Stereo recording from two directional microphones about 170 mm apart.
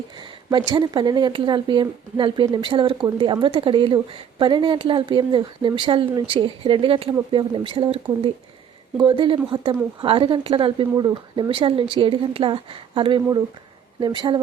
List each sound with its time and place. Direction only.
0.2 s speech: 25° right (ahead or behind)